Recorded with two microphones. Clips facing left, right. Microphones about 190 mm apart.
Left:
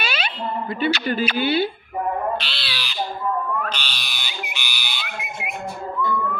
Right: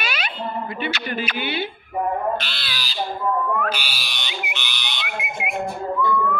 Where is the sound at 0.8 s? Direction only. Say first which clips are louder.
Left 9 dB; 35° left (ahead or behind).